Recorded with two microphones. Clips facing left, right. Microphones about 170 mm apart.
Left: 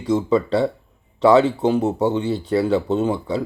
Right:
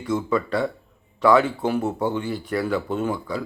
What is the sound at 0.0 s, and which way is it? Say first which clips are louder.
Speech: left 5 dB; 25° left (ahead or behind).